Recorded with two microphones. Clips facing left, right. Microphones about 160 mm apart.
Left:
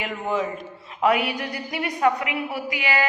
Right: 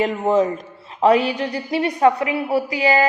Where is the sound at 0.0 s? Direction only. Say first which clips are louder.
Right 8 dB; 35° right (ahead or behind).